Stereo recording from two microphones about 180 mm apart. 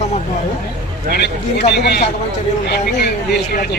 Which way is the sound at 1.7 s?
70° left (ahead or behind).